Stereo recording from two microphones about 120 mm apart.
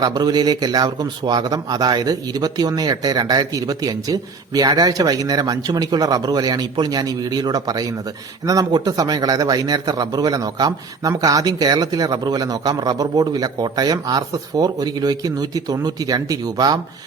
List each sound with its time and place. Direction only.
0.0 s speech: 35° right (ahead or behind)